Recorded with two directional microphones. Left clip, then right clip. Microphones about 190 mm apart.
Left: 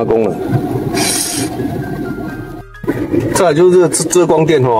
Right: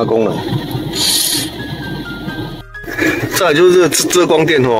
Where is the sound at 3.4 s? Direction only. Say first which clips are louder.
Even; 5° right (ahead or behind).